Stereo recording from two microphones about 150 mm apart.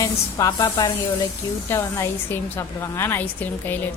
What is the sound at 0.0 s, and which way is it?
A woman's voice, 20° left (ahead or behind).